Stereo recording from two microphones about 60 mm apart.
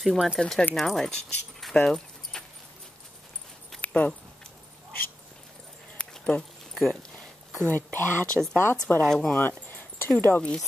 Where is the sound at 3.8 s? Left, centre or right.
Left.